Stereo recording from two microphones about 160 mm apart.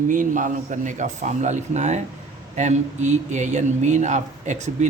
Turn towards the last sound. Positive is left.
turn(degrees=-50)  # may be behind; listen again after turning